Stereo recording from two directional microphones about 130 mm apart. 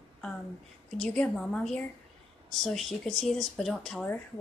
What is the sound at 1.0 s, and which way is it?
A woman's voice, 5° left (ahead or behind).